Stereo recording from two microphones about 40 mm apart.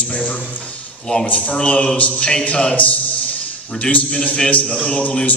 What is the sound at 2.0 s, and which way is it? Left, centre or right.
Speech, left.